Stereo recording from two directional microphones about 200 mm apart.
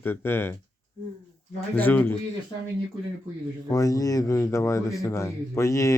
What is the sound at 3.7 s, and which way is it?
Speech, 15° left (ahead or behind).